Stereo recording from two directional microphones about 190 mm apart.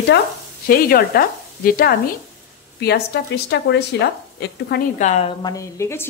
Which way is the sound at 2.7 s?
60° left (ahead or behind).